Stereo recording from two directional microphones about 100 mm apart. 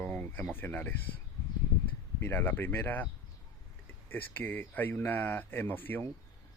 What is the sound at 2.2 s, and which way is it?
Speech, 20° left (ahead or behind).